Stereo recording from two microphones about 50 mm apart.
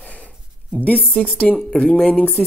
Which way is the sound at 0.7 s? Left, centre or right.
Left.